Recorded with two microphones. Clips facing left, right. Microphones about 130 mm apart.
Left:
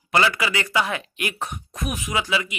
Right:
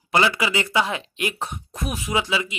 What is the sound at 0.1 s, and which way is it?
Speech, 20° right (ahead or behind).